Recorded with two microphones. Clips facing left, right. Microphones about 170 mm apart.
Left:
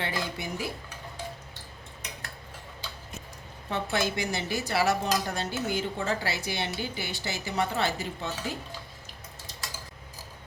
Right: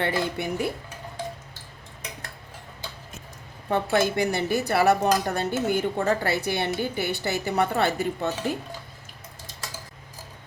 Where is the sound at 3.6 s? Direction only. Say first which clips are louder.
Right 6 dB; 55° right (ahead or behind).